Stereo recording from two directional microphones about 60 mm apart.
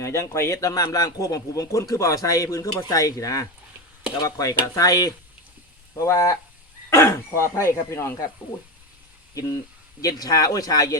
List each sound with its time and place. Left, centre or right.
0.0 s a man's voice: left
4.2 s stir: left
4.6 s speech: left
6.0 s a man's voice: left
6.9 s speech: left
10.0 s speech: left